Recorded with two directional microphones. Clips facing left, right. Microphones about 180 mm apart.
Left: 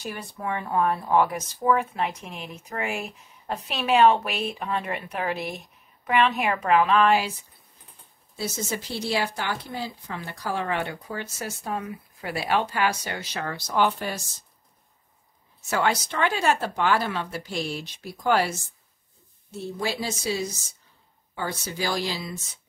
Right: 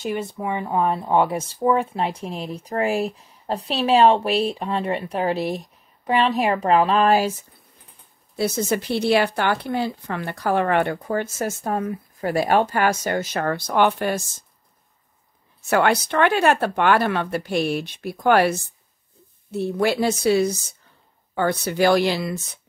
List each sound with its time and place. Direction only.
0.0 s speech: 20° right (ahead or behind); by 7.3 s 40° right (ahead or behind)
8.4 s speech: 60° right (ahead or behind)
15.7 s speech: 60° right (ahead or behind)